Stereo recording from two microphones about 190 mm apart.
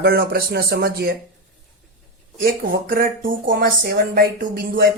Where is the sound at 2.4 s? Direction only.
50° right (ahead or behind).